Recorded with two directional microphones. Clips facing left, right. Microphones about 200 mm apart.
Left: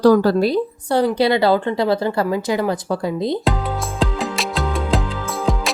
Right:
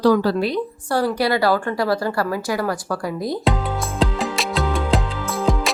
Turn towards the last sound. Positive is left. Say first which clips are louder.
# right 1 dB
turn(degrees=0)  # may be behind; listen again after turning